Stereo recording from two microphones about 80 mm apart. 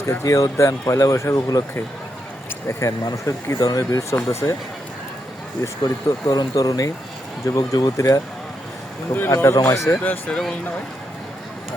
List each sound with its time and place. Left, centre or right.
0.0 s speech: left
2.6 s speech: left
4.1 s speech: left
5.6 s speech: left
9.6 s speech: left
10.0 s speech: left